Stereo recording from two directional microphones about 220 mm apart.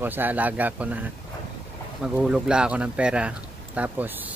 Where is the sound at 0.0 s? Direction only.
10° right (ahead or behind).